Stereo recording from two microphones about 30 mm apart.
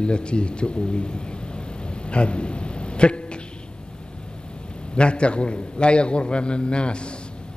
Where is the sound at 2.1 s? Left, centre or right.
Left.